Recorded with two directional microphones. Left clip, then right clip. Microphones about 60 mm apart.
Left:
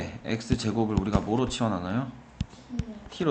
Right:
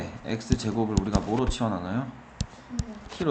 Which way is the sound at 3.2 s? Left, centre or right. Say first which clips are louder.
Even; centre.